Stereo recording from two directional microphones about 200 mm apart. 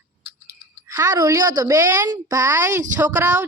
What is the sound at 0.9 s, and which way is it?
Speech, 15° right (ahead or behind).